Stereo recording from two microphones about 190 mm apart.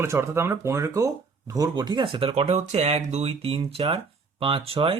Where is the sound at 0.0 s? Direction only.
15° right (ahead or behind).